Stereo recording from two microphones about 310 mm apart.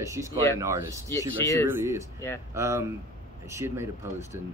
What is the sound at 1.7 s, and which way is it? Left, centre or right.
Speech, centre.